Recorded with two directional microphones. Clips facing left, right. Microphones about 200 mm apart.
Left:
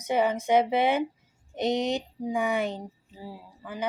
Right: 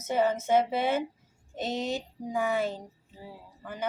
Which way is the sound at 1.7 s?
65° left (ahead or behind).